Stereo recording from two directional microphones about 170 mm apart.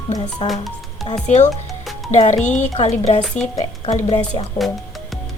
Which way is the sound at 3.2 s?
5° left (ahead or behind).